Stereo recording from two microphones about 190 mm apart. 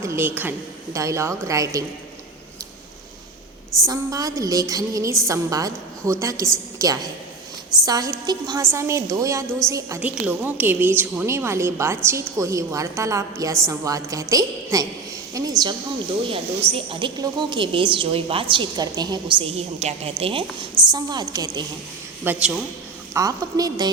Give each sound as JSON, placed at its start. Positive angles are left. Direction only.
{"t": 0.0, "sound": "a woman's voice", "side_deg": -15}
{"t": 3.8, "sound": "a woman's voice", "side_deg": -20}
{"t": 16.3, "sound": "a woman's voice", "side_deg": -30}
{"t": 22.2, "sound": "a man's voice", "side_deg": -5}
{"t": 23.1, "sound": "a woman's voice", "side_deg": -20}